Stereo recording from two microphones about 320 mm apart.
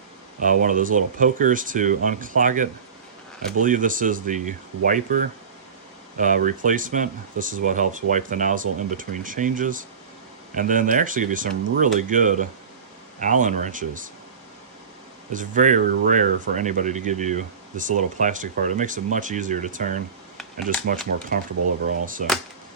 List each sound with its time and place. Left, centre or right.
0.4 s speech: right
15.3 s speech: right
21.1 s speech: right